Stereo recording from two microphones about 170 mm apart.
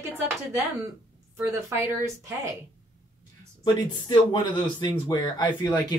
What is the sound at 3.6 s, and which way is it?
Speech, 25° left (ahead or behind).